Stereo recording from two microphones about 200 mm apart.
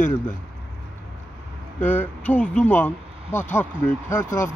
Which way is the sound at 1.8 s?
10° left (ahead or behind).